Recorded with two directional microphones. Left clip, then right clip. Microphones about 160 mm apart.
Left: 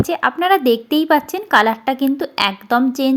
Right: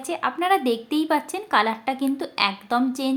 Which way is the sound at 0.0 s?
35° left (ahead or behind).